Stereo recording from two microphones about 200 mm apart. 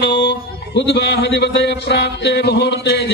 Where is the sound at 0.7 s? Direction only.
60° left (ahead or behind).